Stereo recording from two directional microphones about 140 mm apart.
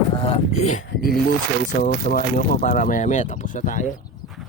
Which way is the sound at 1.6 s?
80° left.